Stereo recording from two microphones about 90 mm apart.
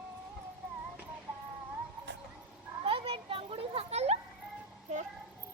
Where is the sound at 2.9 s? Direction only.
90° right.